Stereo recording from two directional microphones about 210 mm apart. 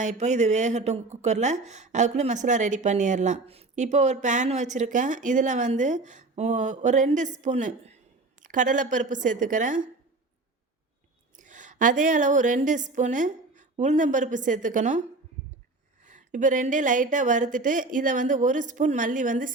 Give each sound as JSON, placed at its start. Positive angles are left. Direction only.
{"t": 0.0, "sound": "a woman's voice", "side_deg": -35}
{"t": 11.3, "sound": "a woman's voice", "side_deg": -35}
{"t": 16.0, "sound": "a woman's voice", "side_deg": -35}